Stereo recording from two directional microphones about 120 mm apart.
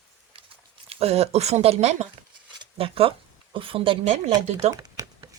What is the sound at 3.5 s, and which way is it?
Speech, 45° right (ahead or behind).